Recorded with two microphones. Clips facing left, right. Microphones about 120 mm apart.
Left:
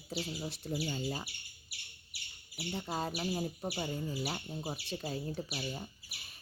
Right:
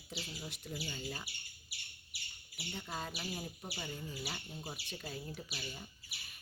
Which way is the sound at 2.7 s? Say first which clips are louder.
Left 6 dB; 35° left (ahead or behind).